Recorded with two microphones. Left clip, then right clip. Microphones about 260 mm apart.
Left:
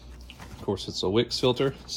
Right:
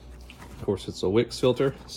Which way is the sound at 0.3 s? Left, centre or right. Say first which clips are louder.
Right 2 dB; centre.